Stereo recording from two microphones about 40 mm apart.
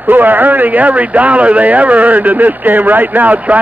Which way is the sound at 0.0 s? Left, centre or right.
Right.